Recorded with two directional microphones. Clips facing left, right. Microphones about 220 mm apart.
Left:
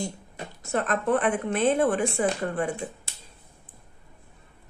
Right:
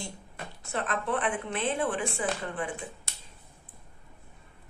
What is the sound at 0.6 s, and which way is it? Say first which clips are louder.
A woman's voice: left 6 dB; 45° left (ahead or behind).